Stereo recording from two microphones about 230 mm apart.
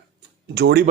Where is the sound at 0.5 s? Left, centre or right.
Right.